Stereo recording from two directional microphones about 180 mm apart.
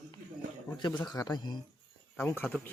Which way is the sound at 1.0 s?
20° left (ahead or behind).